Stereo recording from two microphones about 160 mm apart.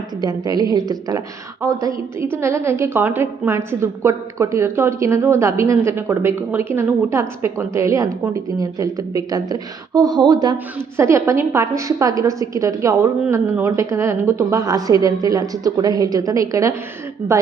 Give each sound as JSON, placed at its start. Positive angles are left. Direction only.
{"t": 0.2, "sound": "a woman's voice", "side_deg": -25}